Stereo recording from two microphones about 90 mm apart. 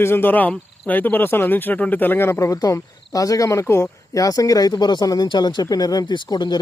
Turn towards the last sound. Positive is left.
turn(degrees=55)  # may be behind; listen again after turning